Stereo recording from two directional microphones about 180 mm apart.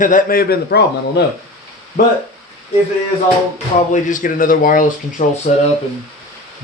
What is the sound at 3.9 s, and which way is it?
Speech, 45° left (ahead or behind).